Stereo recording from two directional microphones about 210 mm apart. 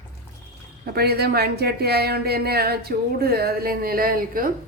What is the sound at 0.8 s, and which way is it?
Speech, 50° right (ahead or behind).